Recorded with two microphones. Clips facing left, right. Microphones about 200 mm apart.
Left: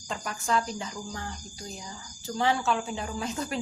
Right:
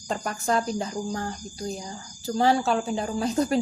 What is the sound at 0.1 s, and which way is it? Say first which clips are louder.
Speech: right 4 dB; 40° right (ahead or behind).